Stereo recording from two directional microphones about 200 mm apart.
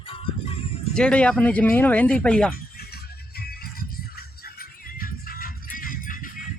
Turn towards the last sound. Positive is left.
turn(degrees=45)  # may be behind; listen again after turning